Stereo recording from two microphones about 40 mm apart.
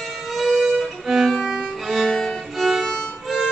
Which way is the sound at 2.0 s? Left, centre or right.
Centre.